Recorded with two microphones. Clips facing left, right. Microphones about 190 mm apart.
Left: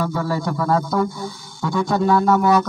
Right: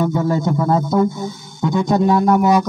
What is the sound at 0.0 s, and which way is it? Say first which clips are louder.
Speech: right 5 dB; 20° right (ahead or behind).